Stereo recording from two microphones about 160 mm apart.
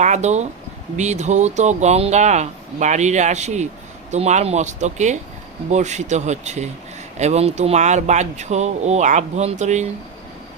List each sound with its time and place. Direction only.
0.0 s speech: 45° right (ahead or behind)